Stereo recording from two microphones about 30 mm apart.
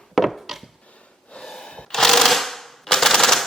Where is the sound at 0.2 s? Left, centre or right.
Centre.